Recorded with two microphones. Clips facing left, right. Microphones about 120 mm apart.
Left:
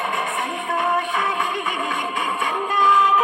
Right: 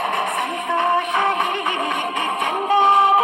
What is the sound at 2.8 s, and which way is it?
Music, 20° right (ahead or behind).